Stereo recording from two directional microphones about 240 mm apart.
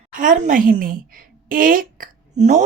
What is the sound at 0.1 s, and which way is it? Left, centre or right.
A woman's voice, right.